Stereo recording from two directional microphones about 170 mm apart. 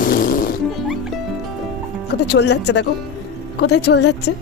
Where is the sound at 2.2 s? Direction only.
85° left.